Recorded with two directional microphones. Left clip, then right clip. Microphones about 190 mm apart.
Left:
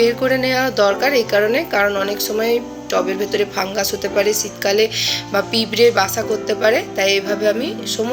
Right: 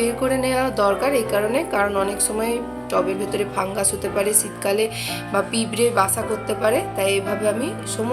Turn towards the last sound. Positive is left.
turn(degrees=0)  # may be behind; listen again after turning